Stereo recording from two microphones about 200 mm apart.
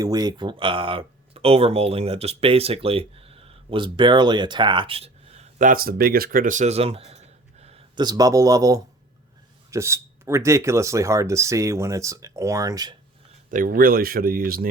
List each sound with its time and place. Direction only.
0.0 s speech: 20° right (ahead or behind)
13.5 s speech: 45° right (ahead or behind)